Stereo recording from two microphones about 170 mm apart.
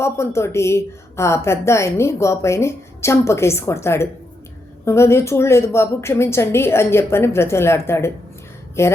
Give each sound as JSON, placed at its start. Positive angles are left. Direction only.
{"t": 0.0, "sound": "a woman's voice", "side_deg": 15}